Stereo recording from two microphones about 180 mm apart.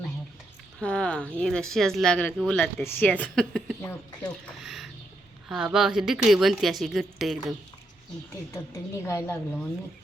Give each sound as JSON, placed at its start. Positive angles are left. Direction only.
{"t": 0.8, "sound": "speech", "side_deg": 5}
{"t": 8.5, "sound": "a woman's voice", "side_deg": 15}